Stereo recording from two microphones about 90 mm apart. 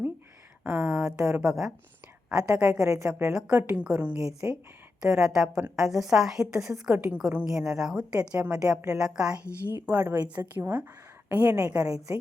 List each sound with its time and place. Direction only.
0.6 s a woman's voice: 10° right (ahead or behind)
9.4 s speech: 30° left (ahead or behind)
10.2 s a woman's voice: 15° right (ahead or behind)